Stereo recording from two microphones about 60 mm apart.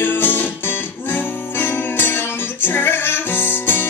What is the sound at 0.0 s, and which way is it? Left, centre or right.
Music, left.